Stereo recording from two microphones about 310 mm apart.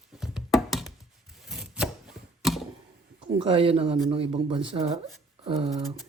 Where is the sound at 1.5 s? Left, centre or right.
Centre.